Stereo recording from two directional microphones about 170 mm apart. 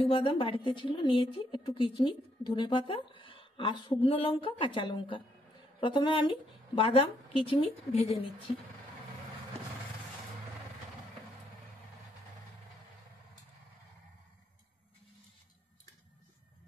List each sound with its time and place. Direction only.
0.0 s a woman's voice: 30° left (ahead or behind)